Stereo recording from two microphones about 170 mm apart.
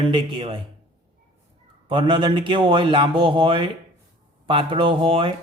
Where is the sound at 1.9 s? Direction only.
30° right (ahead or behind).